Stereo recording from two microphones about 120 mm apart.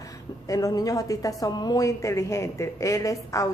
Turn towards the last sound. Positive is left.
turn(degrees=25)  # may be behind; listen again after turning